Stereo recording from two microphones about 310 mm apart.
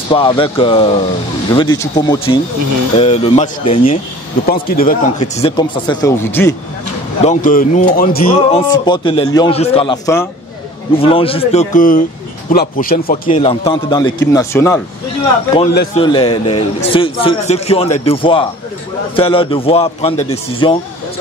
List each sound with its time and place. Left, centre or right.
0.1 s a man's voice: centre
7.2 s a man's voice: left; by 14.8 s centre
15.7 s a man's voice: left
16.0 s a man's voice: centre